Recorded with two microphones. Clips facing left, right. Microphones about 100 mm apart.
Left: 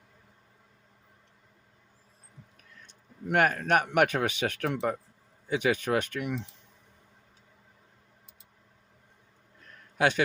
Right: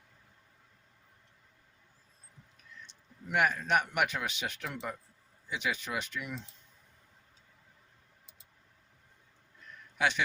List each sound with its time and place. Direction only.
2.8 s a sound: 55° left (ahead or behind)
3.8 s speech: 55° left (ahead or behind)
10.0 s a man's voice: 50° left (ahead or behind)